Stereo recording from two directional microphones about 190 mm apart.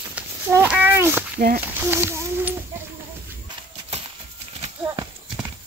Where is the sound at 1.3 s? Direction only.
50° right (ahead or behind).